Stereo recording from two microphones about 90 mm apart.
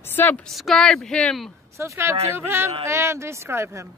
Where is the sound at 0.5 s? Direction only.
Centre (ahead or behind).